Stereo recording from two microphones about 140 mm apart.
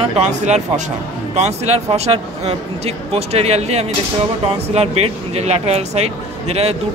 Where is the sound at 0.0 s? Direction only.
50° right (ahead or behind).